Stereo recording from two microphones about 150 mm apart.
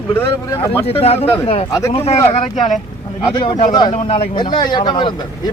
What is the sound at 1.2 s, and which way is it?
Speech, 15° left (ahead or behind).